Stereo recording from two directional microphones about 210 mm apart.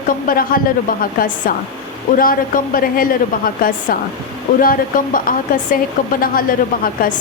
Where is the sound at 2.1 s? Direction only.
40° left (ahead or behind).